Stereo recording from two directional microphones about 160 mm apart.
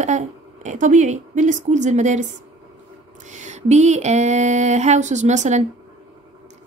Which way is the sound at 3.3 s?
50° right (ahead or behind).